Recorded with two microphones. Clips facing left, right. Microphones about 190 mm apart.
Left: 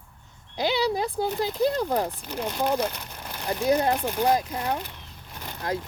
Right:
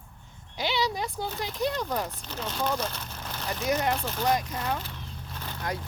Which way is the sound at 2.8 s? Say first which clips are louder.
Left 5 dB; 15° left (ahead or behind).